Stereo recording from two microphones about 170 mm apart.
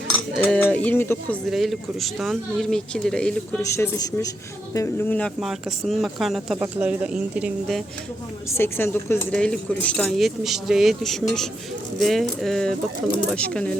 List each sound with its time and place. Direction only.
0.4 s speech: 10° left (ahead or behind)
1.5 s speech: centre (ahead or behind)
3.6 s speech: 20° left (ahead or behind); by 7.9 s 5° right (ahead or behind)
8.4 s speech: 15° left (ahead or behind)